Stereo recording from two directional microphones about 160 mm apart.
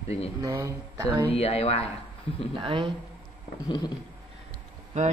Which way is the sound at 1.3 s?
40° left (ahead or behind).